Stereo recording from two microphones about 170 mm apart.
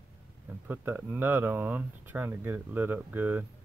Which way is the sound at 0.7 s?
10° right (ahead or behind).